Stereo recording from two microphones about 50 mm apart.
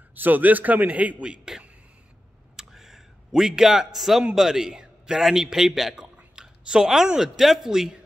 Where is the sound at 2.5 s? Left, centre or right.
Centre.